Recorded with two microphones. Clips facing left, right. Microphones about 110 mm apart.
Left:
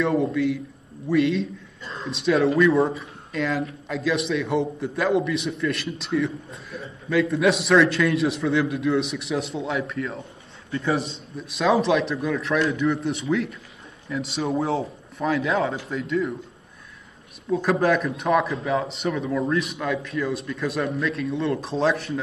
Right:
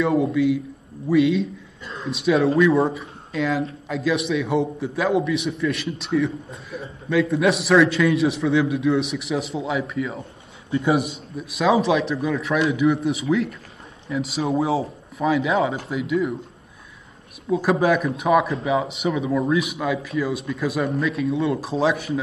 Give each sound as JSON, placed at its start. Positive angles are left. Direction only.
{"t": 0.0, "sound": "a man's voice", "side_deg": 0}
{"t": 10.7, "sound": "a man's voice", "side_deg": -25}
{"t": 11.3, "sound": "a man's voice", "side_deg": 0}
{"t": 17.5, "sound": "a man's voice", "side_deg": -5}